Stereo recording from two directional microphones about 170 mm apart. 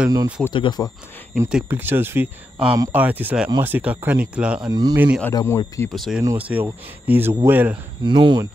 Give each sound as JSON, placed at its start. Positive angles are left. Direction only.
{"t": 0.1, "sound": "speech", "side_deg": -20}
{"t": 0.5, "sound": "speech", "side_deg": 25}
{"t": 1.5, "sound": "speech", "side_deg": -10}
{"t": 4.6, "sound": "speech", "side_deg": -20}
{"t": 4.9, "sound": "speech", "side_deg": -10}
{"t": 5.3, "sound": "speech", "side_deg": 20}
{"t": 5.9, "sound": "speech", "side_deg": 0}
{"t": 8.0, "sound": "speech", "side_deg": -25}